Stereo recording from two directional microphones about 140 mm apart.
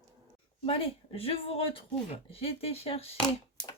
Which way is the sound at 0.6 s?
45° left (ahead or behind).